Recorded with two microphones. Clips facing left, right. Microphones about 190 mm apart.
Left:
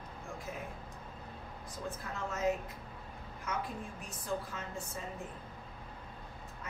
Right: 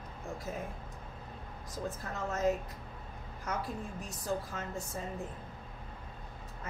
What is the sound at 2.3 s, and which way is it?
Speech, 40° right (ahead or behind).